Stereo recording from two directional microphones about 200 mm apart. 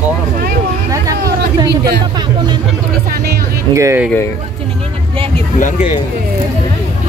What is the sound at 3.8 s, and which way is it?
Speech, 15° right (ahead or behind).